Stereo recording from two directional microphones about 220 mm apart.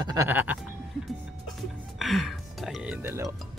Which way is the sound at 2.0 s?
Centre (ahead or behind).